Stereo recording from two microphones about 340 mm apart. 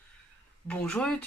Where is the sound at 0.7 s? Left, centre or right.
Centre.